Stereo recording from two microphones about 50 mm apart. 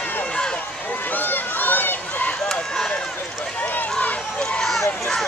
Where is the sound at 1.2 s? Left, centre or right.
Left.